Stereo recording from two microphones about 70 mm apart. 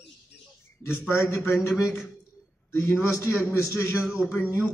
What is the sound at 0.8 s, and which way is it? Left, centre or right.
Speech, left.